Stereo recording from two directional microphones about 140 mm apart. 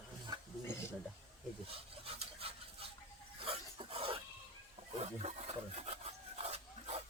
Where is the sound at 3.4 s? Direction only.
40° right (ahead or behind).